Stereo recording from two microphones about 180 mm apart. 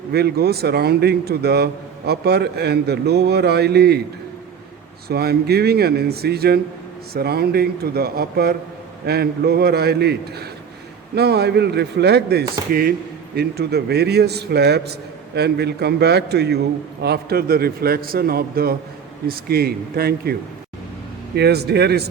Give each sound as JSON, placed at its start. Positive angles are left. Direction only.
{"t": 0.1, "sound": "a man's voice", "side_deg": -60}
{"t": 5.0, "sound": "a man's voice", "side_deg": -60}
{"t": 21.3, "sound": "a man's voice", "side_deg": -65}